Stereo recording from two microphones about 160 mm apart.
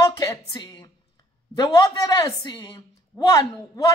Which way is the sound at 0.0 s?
20° left (ahead or behind).